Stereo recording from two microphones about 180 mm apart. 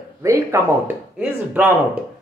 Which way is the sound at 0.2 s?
15° right (ahead or behind).